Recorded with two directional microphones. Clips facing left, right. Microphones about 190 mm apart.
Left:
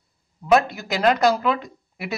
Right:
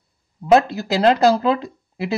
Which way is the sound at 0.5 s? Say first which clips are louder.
Right 3 dB; 30° right (ahead or behind).